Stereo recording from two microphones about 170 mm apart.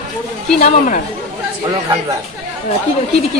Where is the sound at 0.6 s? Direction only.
45° left (ahead or behind).